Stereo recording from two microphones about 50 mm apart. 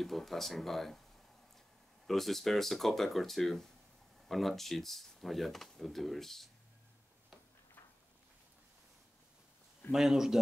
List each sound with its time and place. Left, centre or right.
0.0 s speech: centre
2.0 s speech: centre
9.8 s speech: centre